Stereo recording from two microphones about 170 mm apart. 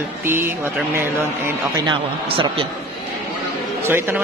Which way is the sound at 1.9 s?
30° right (ahead or behind).